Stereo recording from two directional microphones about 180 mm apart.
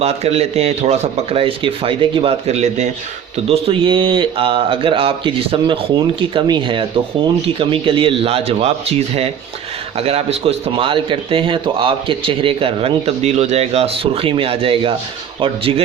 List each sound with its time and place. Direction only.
0.0 s a man's voice: 35° right (ahead or behind)
3.5 s a man's voice: 30° right (ahead or behind)